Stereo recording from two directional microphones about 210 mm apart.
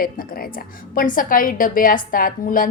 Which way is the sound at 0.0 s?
45° left (ahead or behind).